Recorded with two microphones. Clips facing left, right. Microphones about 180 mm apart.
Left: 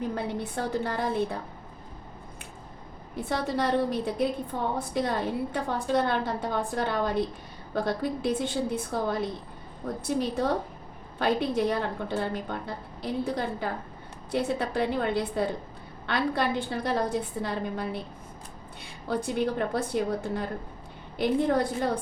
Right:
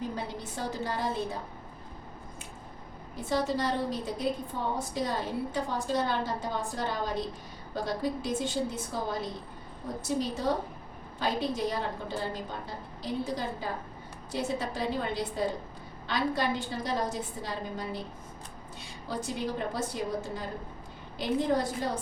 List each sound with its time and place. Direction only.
0.2 s a woman's voice: 60° left (ahead or behind)
3.2 s a woman's voice: 60° left (ahead or behind)
19.0 s a woman's voice: 60° left (ahead or behind)